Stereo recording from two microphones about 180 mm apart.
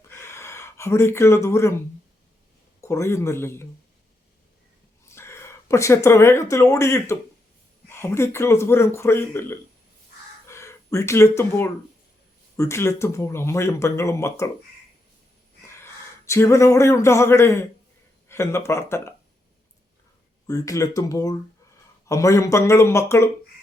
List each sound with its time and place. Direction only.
0.1 s a sound: 15° left (ahead or behind)
2.8 s speech: 15° left (ahead or behind)
5.0 s speech: 15° left (ahead or behind)
15.6 s speech: 15° left (ahead or behind)
20.5 s speech: 20° left (ahead or behind)